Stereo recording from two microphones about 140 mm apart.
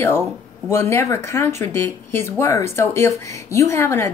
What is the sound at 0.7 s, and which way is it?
Speech, 20° left (ahead or behind).